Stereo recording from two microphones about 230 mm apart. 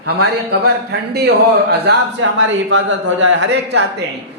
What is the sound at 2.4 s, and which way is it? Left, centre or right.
Speech, right.